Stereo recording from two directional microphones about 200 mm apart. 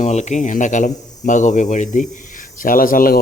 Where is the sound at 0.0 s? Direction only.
35° left (ahead or behind).